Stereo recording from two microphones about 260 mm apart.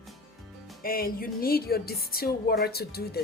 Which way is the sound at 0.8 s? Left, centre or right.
Left.